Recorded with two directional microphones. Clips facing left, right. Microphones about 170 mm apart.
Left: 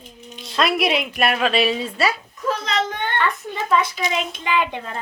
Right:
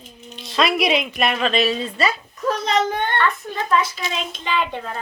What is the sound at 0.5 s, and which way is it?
Speech, centre (ahead or behind).